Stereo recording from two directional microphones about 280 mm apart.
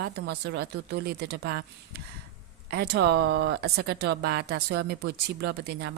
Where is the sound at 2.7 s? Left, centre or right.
Right.